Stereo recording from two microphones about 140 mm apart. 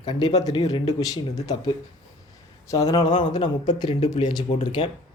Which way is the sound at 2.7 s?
25° left (ahead or behind).